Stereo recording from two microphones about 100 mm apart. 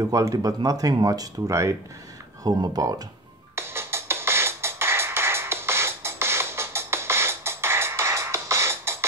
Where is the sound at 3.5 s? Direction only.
25° right (ahead or behind).